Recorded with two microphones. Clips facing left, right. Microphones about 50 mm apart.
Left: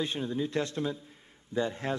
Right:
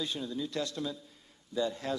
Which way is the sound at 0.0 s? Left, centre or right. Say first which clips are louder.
Left 4 dB; left.